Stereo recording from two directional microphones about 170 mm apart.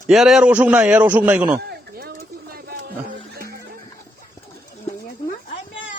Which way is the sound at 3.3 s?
70° right (ahead or behind).